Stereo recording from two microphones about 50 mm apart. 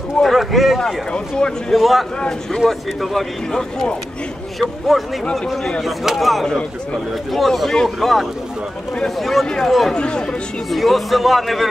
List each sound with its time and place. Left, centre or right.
0.2 s a man's voice: centre
2.1 s a man's voice: centre
2.6 s a man's voice: centre
4.6 s a man's voice: centre
6.4 s a man's voice: centre
7.3 s a man's voice: centre
9.9 s a man's voice: centre
10.7 s a man's voice: centre